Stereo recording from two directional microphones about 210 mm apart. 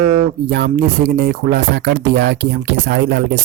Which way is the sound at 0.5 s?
55° right (ahead or behind).